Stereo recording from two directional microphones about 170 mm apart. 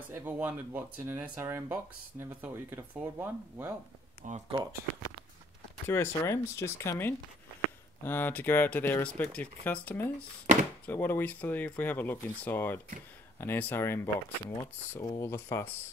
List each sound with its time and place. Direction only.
0.1 s speech: 10° right (ahead or behind)
4.3 s speech: 30° right (ahead or behind)
5.9 s speech: 15° left (ahead or behind)